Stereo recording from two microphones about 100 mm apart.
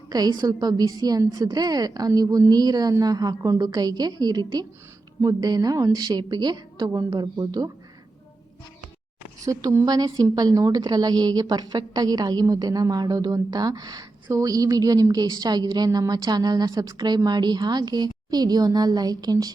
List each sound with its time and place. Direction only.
0.1 s a woman's voice: 45° right (ahead or behind)
9.4 s a woman's voice: 35° right (ahead or behind)